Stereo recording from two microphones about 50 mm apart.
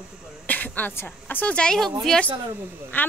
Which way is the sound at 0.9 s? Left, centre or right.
Left.